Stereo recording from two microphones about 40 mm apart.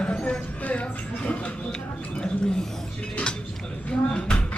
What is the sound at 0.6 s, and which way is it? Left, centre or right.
Speech, left.